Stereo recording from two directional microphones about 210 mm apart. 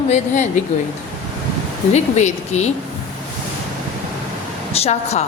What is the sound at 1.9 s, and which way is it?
Speech, 35° left (ahead or behind).